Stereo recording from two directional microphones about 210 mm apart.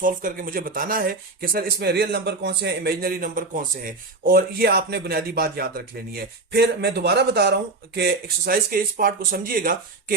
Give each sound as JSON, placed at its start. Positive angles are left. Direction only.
{"t": 0.0, "sound": "speech", "side_deg": -40}